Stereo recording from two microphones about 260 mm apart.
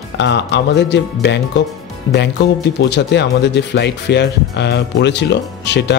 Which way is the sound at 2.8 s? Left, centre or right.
Left.